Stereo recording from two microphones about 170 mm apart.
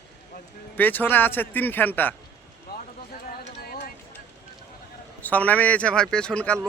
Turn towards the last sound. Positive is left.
turn(degrees=5)  # may be behind; listen again after turning